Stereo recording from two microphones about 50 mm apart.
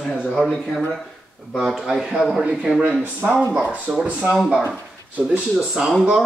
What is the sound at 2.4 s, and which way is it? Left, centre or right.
Speech, centre.